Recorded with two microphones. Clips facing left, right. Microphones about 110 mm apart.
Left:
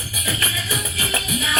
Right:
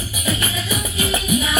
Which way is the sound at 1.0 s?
20° right (ahead or behind).